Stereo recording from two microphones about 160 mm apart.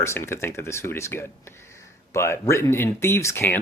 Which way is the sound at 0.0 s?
15° left (ahead or behind).